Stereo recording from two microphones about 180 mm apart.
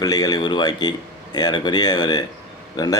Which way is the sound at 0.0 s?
20° left (ahead or behind).